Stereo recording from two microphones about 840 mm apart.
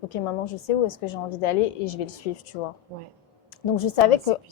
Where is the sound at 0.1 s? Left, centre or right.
Left.